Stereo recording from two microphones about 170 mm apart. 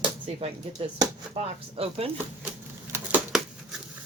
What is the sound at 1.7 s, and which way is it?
Speech, 35° right (ahead or behind).